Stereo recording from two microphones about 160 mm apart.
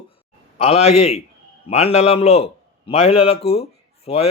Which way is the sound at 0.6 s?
40° left (ahead or behind).